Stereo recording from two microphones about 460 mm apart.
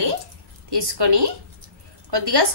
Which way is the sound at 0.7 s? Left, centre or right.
Right.